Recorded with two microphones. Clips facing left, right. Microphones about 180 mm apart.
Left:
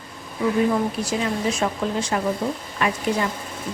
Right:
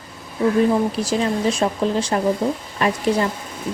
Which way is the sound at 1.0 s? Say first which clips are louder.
Right 4 dB; 30° right (ahead or behind).